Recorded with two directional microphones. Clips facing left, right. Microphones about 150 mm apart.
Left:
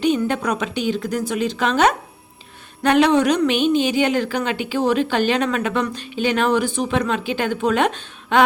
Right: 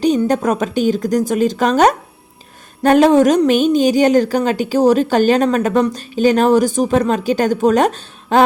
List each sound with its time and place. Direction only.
0.0 s a woman's voice: 35° right (ahead or behind)